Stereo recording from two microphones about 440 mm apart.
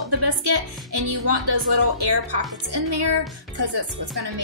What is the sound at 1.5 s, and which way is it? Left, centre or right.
Speech, right.